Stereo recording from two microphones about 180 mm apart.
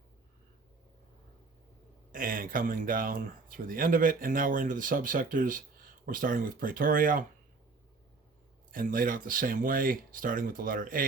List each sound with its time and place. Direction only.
2.1 s speech: 50° right (ahead or behind)
8.7 s speech: 50° right (ahead or behind)